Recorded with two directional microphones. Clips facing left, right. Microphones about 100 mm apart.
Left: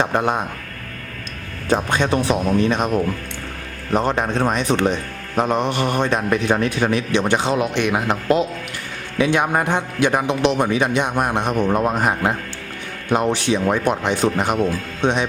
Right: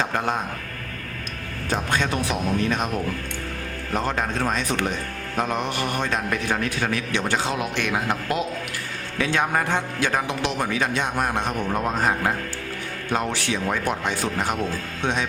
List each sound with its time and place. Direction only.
0.0 s a man's voice: 20° left (ahead or behind)
1.7 s a man's voice: 25° left (ahead or behind)
3.9 s a man's voice: 20° left (ahead or behind)